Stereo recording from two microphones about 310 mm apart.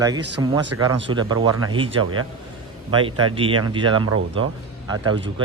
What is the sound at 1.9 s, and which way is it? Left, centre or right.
Speech, right.